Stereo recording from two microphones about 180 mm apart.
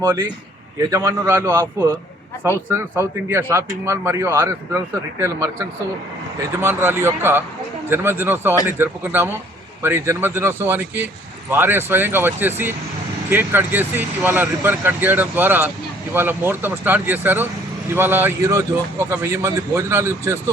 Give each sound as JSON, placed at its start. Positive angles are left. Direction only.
{"t": 0.0, "sound": "speech", "side_deg": -15}